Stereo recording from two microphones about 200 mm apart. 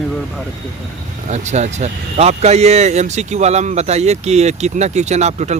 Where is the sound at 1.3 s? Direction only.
35° right (ahead or behind).